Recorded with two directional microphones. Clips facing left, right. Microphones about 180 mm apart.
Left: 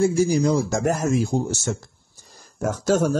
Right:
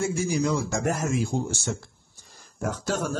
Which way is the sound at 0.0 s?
35° left (ahead or behind).